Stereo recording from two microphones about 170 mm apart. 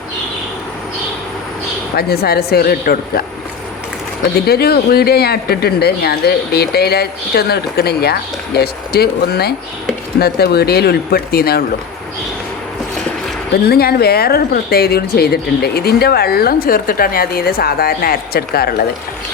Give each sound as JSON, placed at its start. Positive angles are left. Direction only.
{"t": 2.0, "sound": "speech", "side_deg": 65}
{"t": 4.4, "sound": "speech", "side_deg": 65}
{"t": 13.7, "sound": "a woman's voice", "side_deg": 65}